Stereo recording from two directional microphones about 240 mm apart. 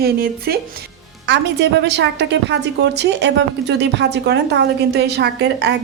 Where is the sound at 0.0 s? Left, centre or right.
Right.